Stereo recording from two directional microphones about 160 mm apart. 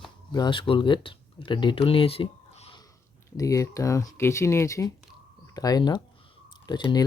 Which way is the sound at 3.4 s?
20° left (ahead or behind).